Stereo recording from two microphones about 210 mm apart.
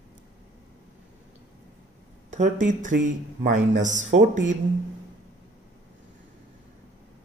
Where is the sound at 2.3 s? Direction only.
35° right (ahead or behind).